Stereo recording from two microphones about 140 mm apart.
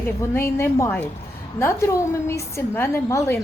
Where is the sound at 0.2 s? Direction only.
20° left (ahead or behind).